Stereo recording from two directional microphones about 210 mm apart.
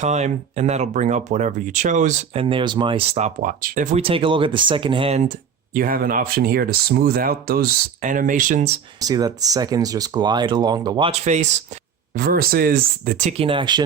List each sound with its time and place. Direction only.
0.0 s speech: 35° right (ahead or behind)
4.0 s speech: 25° right (ahead or behind)
5.7 s speech: 40° right (ahead or behind)
9.0 s speech: 20° right (ahead or behind)
12.1 s speech: 45° right (ahead or behind)
13.5 s speech: 20° right (ahead or behind)